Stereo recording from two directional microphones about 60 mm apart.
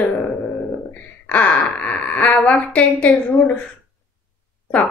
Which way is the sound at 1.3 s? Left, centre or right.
Left.